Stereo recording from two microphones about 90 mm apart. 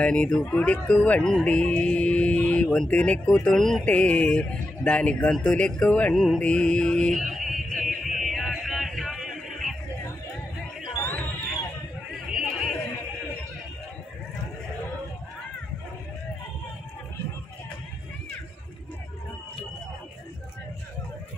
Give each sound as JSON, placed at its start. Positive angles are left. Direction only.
{"t": 0.0, "sound": "speech", "side_deg": 10}
{"t": 6.1, "sound": "mantra", "side_deg": 5}
{"t": 11.0, "sound": "crowd", "side_deg": 20}
{"t": 12.3, "sound": "a sound", "side_deg": -5}